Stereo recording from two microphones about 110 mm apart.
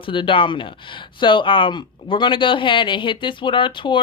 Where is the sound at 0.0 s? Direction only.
50° left (ahead or behind).